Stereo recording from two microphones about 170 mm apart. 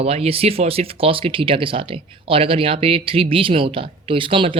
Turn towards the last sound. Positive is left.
turn(degrees=-30)  # may be behind; listen again after turning